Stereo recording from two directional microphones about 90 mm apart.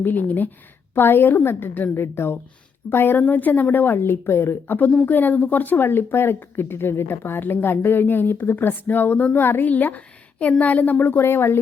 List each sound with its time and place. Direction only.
0.0 s speech: 20° left (ahead or behind)